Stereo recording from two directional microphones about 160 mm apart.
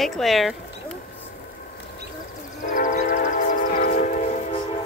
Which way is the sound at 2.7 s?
55° left (ahead or behind).